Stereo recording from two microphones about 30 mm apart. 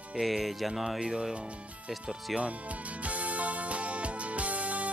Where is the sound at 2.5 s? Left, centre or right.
Right.